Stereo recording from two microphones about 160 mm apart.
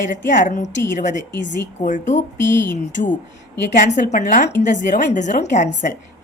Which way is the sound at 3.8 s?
50° left (ahead or behind).